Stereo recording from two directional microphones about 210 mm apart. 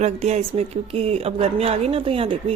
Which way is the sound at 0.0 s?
30° right (ahead or behind).